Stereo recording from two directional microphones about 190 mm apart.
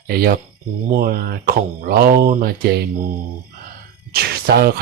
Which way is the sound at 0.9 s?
55° right (ahead or behind).